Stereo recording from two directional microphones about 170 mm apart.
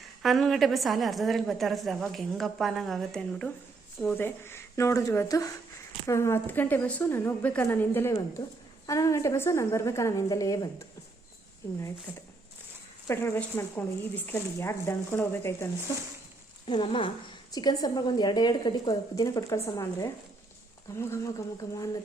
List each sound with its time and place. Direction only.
0.2 s a woman's voice: centre (ahead or behind); by 10.8 s 20° left (ahead or behind)
12.1 s speech: 10° right (ahead or behind)
13.1 s a woman's voice: 15° left (ahead or behind)
16.6 s a woman's voice: 30° left (ahead or behind)